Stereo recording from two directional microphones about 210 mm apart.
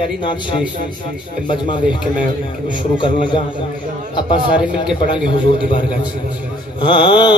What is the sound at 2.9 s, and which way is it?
Speech, 25° left (ahead or behind).